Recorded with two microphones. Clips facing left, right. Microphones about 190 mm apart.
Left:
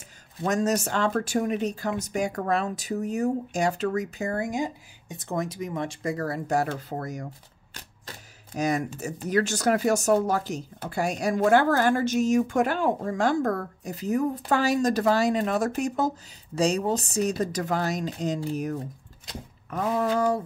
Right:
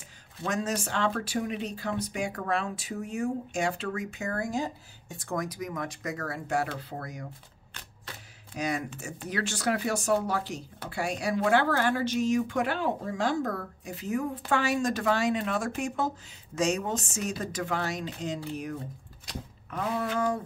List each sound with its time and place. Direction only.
0.4 s speech: 40° left (ahead or behind)
4.4 s speech: 15° left (ahead or behind); by 7.2 s 45° left (ahead or behind)
8.5 s speech: 45° left (ahead or behind)